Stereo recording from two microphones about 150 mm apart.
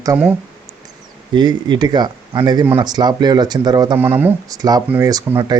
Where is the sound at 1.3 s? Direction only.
30° right (ahead or behind).